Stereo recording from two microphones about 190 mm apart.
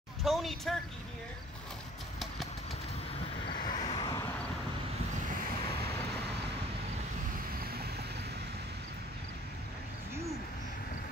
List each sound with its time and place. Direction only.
0.2 s speech: centre (ahead or behind)
3.4 s vehicle: 25° left (ahead or behind)
3.8 s a sound: 25° left (ahead or behind)